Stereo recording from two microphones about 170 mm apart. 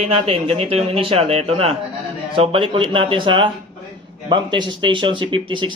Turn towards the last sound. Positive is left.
turn(degrees=-30)  # may be behind; listen again after turning